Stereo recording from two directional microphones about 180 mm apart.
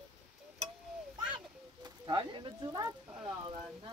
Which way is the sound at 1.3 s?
25° right (ahead or behind).